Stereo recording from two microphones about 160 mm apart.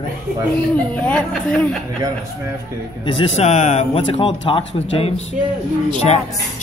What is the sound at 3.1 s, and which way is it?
Speech, 35° left (ahead or behind).